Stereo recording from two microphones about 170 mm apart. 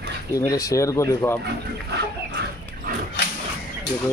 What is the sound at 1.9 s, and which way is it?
Chicken, 75° right (ahead or behind).